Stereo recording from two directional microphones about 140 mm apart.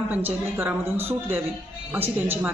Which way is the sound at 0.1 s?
10° right (ahead or behind).